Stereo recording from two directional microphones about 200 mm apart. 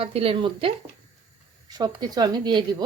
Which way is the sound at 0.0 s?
30° right (ahead or behind).